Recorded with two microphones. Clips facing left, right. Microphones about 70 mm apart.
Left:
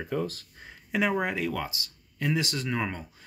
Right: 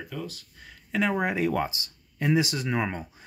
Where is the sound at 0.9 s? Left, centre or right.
Centre.